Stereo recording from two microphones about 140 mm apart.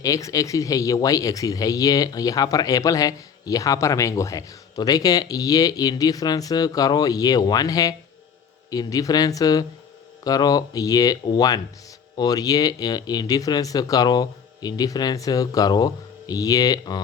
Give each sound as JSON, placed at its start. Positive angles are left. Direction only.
{"t": 0.0, "sound": "speech", "side_deg": 25}